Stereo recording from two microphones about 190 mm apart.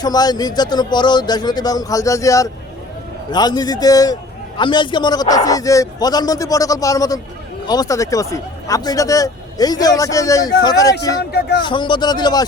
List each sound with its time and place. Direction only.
0.0 s a man's voice: 20° left (ahead or behind)
11.2 s speech: 55° left (ahead or behind)
11.6 s a man's voice: 25° left (ahead or behind)